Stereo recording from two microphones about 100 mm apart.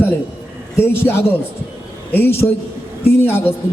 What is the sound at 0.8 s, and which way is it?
A man's voice, 20° left (ahead or behind).